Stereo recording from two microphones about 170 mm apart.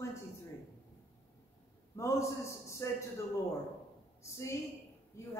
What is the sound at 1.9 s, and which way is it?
A woman's voice, 15° left (ahead or behind).